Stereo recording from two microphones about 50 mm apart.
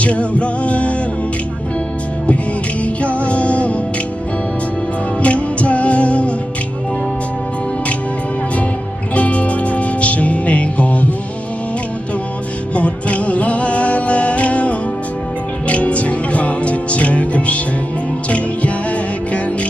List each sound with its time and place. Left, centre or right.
0.0 s music: left
2.8 s music: left
5.2 s music: left
9.1 s music: left
12.7 s music: left